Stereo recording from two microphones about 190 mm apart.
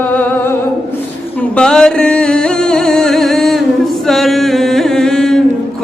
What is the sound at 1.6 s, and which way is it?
Music, 5° left (ahead or behind).